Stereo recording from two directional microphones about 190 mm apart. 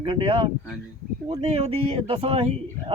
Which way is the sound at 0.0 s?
25° right (ahead or behind).